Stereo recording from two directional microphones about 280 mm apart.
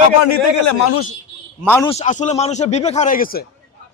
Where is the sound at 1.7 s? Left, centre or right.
Centre.